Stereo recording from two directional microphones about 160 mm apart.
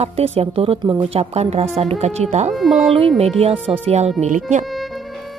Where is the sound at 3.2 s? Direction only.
40° right (ahead or behind).